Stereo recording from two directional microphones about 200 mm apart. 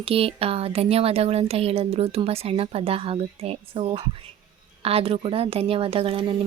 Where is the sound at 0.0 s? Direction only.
30° right (ahead or behind).